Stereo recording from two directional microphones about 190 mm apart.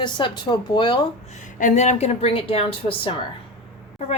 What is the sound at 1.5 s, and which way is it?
A woman's voice, 40° left (ahead or behind).